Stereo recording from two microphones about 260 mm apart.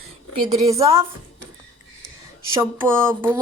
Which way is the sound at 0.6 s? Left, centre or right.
Centre.